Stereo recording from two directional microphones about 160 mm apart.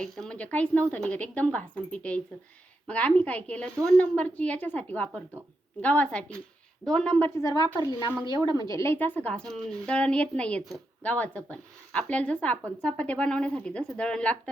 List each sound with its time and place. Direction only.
0.0 s speech: 5° left (ahead or behind)
7.4 s a woman's voice: 25° left (ahead or behind); by 14.5 s 5° left (ahead or behind)